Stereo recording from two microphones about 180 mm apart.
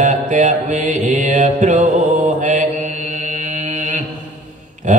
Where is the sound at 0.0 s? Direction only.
45° right (ahead or behind).